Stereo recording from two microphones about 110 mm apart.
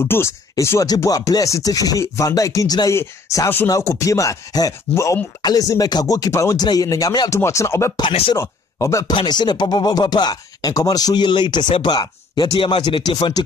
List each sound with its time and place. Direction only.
0.0 s speech: 25° left (ahead or behind)
9.1 s speech: 40° left (ahead or behind)
12.5 s speech: 50° left (ahead or behind)